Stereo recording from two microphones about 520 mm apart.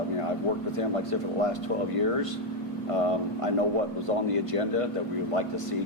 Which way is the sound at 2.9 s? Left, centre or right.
Right.